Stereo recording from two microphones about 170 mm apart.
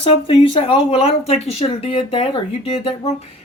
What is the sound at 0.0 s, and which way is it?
Speech, 30° left (ahead or behind).